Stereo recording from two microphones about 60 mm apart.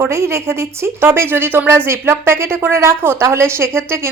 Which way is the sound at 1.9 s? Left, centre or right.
Right.